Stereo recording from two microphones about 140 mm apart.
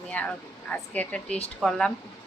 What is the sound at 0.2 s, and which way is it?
A woman's voice, 10° left (ahead or behind).